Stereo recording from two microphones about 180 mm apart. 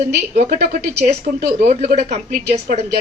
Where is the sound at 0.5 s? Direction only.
60° right (ahead or behind).